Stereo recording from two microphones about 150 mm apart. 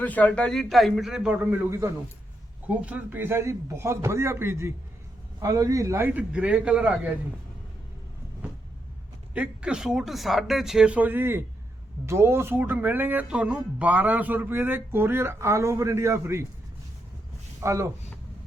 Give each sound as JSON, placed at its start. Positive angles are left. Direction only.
{"t": 0.0, "sound": "speech", "side_deg": 10}
{"t": 9.3, "sound": "speech", "side_deg": -10}
{"t": 17.6, "sound": "speech", "side_deg": -20}